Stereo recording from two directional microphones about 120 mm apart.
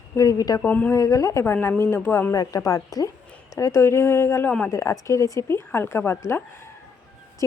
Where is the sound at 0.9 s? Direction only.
30° left (ahead or behind).